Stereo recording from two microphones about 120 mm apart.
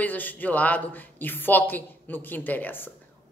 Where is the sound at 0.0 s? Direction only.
15° left (ahead or behind).